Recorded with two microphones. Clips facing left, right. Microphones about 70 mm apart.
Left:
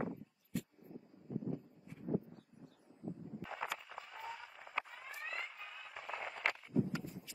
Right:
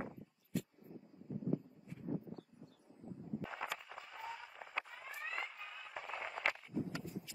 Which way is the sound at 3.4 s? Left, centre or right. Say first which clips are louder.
Left 3 dB; centre.